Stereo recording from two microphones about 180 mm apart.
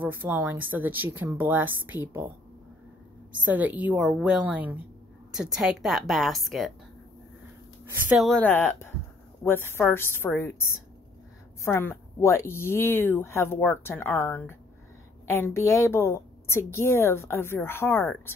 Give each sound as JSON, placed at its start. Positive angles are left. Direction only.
{"t": 0.0, "sound": "speech", "side_deg": -10}
{"t": 3.4, "sound": "a woman's voice", "side_deg": -10}
{"t": 7.9, "sound": "speech", "side_deg": -10}
{"t": 8.4, "sound": "speech", "side_deg": 10}